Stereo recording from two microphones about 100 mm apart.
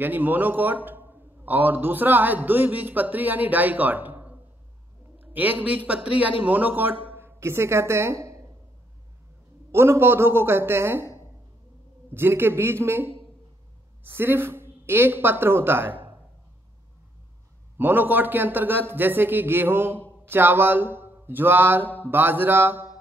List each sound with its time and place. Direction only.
0.0 s a man's voice: 20° right (ahead or behind)
9.7 s speech: 25° right (ahead or behind)
17.7 s speech: 20° right (ahead or behind)